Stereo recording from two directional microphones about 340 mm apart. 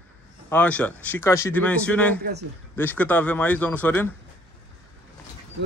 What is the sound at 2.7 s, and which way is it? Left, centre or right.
A man's voice, centre.